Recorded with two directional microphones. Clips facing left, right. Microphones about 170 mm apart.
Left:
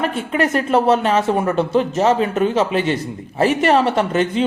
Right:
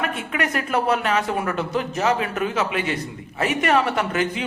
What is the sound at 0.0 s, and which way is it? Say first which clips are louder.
A woman's voice: left 6 dB; 30° left (ahead or behind).